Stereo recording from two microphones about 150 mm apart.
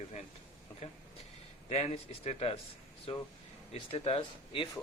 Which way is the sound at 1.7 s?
45° left (ahead or behind).